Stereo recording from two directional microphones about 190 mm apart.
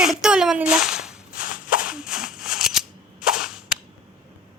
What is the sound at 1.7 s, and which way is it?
Cap gun, 5° right (ahead or behind).